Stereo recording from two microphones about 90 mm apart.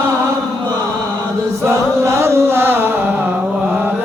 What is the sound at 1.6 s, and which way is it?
Chant, 30° right (ahead or behind).